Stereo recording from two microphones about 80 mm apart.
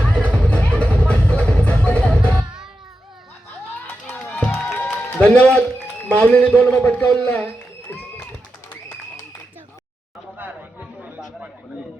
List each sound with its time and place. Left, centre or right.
0.0 s music: centre
3.8 s run: left
4.5 s music: left
6.1 s a man's voice: centre
10.3 s a sound: right